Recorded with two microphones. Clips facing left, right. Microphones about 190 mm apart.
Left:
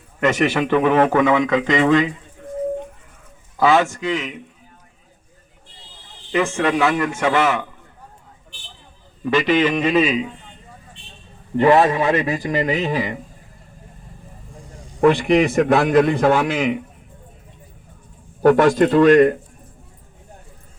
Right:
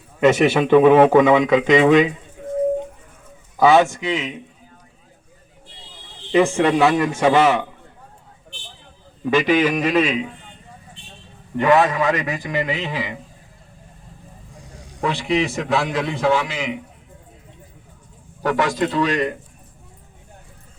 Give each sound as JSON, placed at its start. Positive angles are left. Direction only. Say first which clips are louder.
{"t": 0.3, "sound": "speech", "louder": "right 4 dB", "side_deg": -10}
{"t": 3.6, "sound": "a man's voice", "louder": "right 2 dB", "side_deg": -15}
{"t": 6.3, "sound": "speech", "louder": "right 4 dB", "side_deg": -10}
{"t": 6.7, "sound": "a man's voice", "louder": "right 2 dB", "side_deg": -25}
{"t": 7.3, "sound": "speech", "louder": "right 4 dB", "side_deg": -10}
{"t": 9.2, "sound": "speech", "louder": "even", "side_deg": -15}
{"t": 11.5, "sound": "a man's voice", "louder": "left 2 dB", "side_deg": 30}
{"t": 15.0, "sound": "a man's voice", "louder": "left 6 dB", "side_deg": 55}
{"t": 18.4, "sound": "speech", "louder": "left 7 dB", "side_deg": 50}